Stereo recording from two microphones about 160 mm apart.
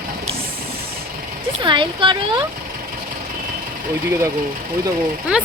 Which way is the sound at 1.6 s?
30° right (ahead or behind).